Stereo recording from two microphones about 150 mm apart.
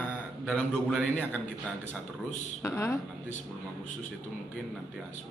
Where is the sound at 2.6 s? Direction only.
15° left (ahead or behind).